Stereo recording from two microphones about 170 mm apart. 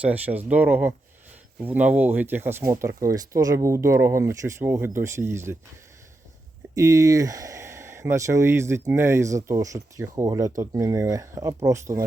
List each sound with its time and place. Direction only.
0.0 s speech: 10° right (ahead or behind)
6.7 s speech: 20° right (ahead or behind)